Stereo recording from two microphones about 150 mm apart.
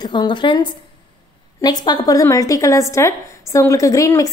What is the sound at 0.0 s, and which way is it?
A woman's voice, 30° left (ahead or behind).